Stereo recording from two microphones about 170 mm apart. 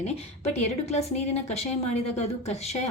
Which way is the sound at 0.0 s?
40° left (ahead or behind).